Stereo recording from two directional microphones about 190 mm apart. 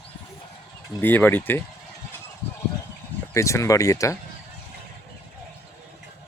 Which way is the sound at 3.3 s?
15° left (ahead or behind).